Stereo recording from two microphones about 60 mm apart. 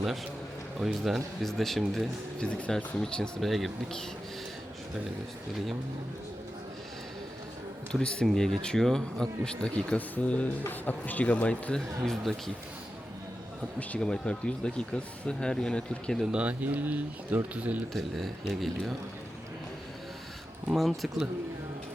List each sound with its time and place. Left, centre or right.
1.0 s speech: centre
2.4 s speech: centre
7.9 s speech: centre
11.7 s speech: centre
14.0 s speech: centre
16.2 s speech: centre
17.9 s speech: centre
20.7 s speech: centre